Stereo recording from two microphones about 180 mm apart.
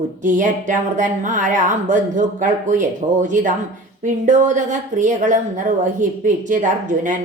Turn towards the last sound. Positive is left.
turn(degrees=-45)  # may be behind; listen again after turning